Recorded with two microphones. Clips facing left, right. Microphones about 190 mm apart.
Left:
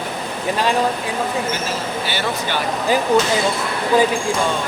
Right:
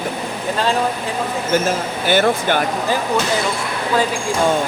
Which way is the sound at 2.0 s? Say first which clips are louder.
Right 12 dB; 50° right (ahead or behind).